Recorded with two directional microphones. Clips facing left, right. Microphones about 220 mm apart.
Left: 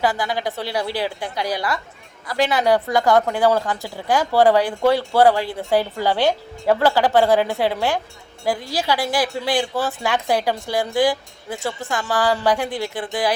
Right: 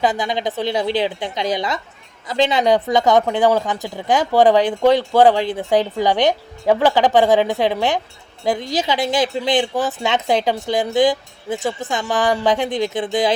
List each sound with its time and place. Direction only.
0.0 s a woman's voice: 20° right (ahead or behind)